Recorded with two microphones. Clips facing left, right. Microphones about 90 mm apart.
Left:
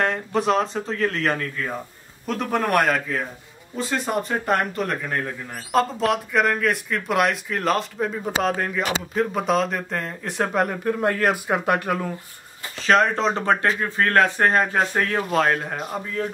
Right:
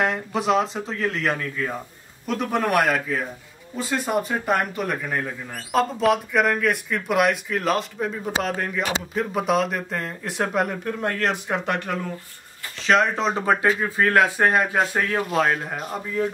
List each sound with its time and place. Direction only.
0.0 s speech: centre (ahead or behind)